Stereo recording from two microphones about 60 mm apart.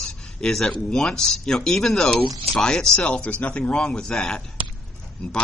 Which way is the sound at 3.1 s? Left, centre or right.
Left.